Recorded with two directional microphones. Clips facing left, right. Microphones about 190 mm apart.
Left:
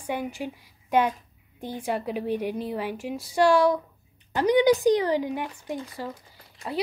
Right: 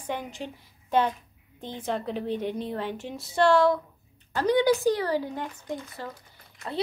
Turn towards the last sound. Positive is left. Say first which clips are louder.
# left 2 dB
turn(degrees=15)  # may be behind; listen again after turning